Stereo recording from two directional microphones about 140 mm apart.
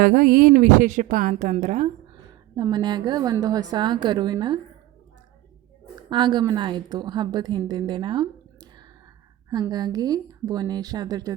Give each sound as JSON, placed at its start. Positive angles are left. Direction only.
{"t": 0.0, "sound": "a woman's voice", "side_deg": -90}
{"t": 2.6, "sound": "a woman's voice", "side_deg": -30}
{"t": 6.1, "sound": "a woman's voice", "side_deg": -35}